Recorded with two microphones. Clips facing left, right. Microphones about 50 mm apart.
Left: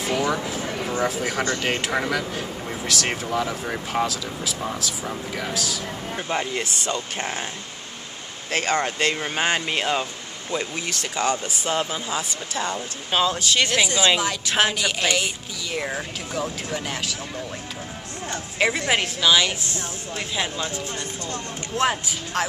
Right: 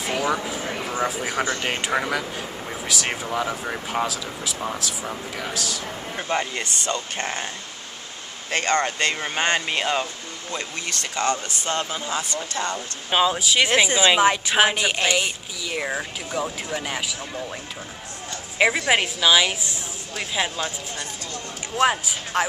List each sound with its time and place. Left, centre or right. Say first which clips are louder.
0.0 s speech: even; centre
8.5 s speech: right 1 dB; centre
13.1 s speech: right 1 dB; centre
13.7 s speech: right 4 dB; centre
14.4 s speech: right 2 dB; centre
18.6 s speech: right 2 dB; centre
21.7 s speech: right 2 dB; centre